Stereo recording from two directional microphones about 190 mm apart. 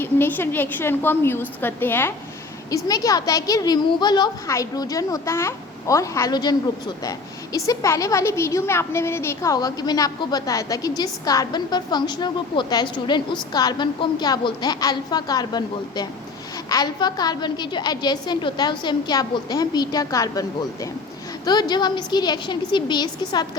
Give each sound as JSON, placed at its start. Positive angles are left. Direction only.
{"t": 0.0, "sound": "a woman's voice", "side_deg": 10}
{"t": 21.4, "sound": "speech", "side_deg": 20}